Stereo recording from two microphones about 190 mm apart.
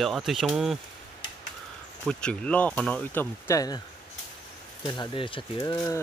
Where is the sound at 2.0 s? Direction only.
5° left (ahead or behind).